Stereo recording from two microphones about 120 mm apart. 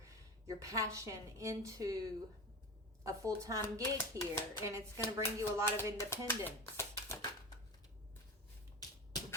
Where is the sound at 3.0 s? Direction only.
25° right (ahead or behind).